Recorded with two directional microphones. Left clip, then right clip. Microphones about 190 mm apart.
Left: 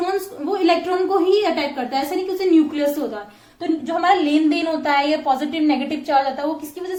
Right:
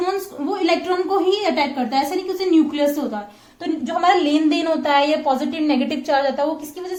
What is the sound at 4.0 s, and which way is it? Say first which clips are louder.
A woman's voice: right 1 dB; 40° right (ahead or behind).